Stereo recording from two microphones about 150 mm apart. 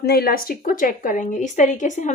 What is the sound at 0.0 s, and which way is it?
Speech, 90° left.